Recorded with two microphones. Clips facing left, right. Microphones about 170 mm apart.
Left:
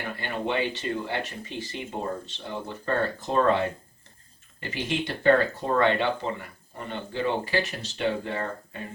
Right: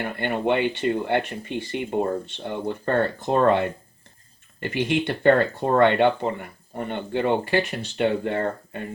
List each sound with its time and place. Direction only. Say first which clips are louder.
0.0 s speech: right 6 dB; 60° right (ahead or behind)
4.7 s speech: right 6 dB; 60° right (ahead or behind)